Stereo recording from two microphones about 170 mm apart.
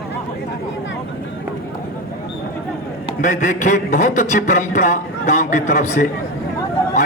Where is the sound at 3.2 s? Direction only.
50° left (ahead or behind).